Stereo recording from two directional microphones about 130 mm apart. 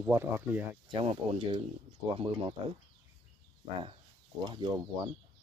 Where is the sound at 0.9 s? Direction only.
50° right (ahead or behind).